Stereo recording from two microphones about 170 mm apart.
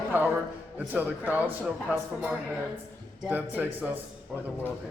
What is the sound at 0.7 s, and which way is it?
Speech, 10° right (ahead or behind).